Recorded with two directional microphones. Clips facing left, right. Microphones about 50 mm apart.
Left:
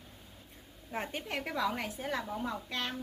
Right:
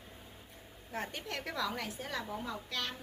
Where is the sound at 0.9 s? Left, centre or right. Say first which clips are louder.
Left 3 dB; centre.